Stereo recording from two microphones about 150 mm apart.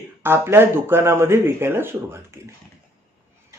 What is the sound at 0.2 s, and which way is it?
A man's voice, 15° right (ahead or behind).